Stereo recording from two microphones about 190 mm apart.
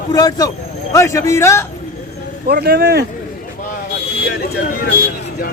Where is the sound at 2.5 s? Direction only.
55° right (ahead or behind).